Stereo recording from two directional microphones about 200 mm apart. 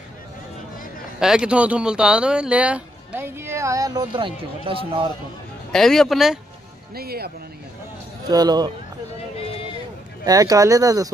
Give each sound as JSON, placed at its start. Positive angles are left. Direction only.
{"t": 1.2, "sound": "speech", "side_deg": -5}
{"t": 5.7, "sound": "speech", "side_deg": 5}
{"t": 7.0, "sound": "speech", "side_deg": -50}
{"t": 8.3, "sound": "speech", "side_deg": -20}
{"t": 10.2, "sound": "speech", "side_deg": -20}